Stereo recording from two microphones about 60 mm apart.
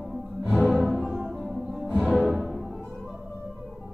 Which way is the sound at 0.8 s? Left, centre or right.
Centre.